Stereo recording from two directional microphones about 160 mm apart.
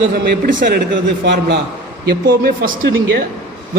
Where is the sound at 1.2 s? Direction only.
90° right.